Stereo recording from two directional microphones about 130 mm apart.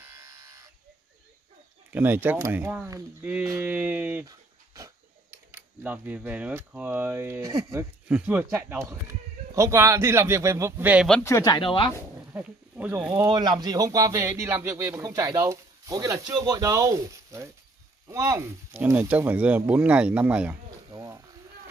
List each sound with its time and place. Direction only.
0.0 s electric shaver: 25° right (ahead or behind)
1.9 s speech: 15° right (ahead or behind)
4.3 s dog: 25° right (ahead or behind)
5.5 s speech: 15° right (ahead or behind)
8.1 s speech: 15° right (ahead or behind)
11.2 s speech: 25° left (ahead or behind)
12.3 s speech: 15° right (ahead or behind)
13.3 s speech: 30° right (ahead or behind)
18.7 s speech: 10° right (ahead or behind)
20.9 s a sound: 25° right (ahead or behind)